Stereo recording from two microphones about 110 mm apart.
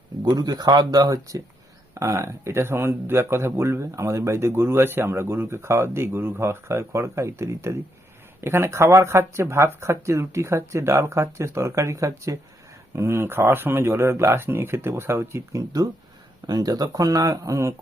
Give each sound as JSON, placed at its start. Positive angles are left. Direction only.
{"t": 0.3, "sound": "speech", "side_deg": -35}